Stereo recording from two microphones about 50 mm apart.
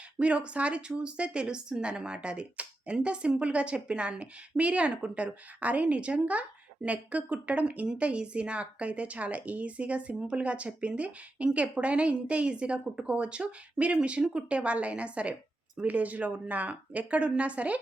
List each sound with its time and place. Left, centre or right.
0.2 s a woman's voice: right